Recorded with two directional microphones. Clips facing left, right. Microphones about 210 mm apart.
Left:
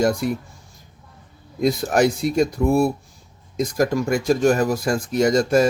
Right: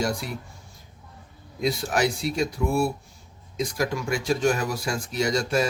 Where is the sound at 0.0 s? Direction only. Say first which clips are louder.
Left 8 dB; 50° left (ahead or behind).